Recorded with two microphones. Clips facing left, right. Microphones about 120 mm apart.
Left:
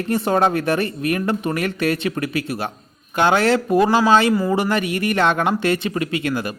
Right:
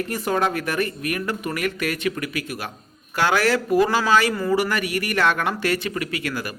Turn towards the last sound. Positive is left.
turn(degrees=25)  # may be behind; listen again after turning